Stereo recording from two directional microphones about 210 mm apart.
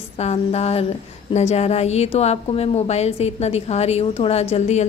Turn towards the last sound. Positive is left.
turn(degrees=30)  # may be behind; listen again after turning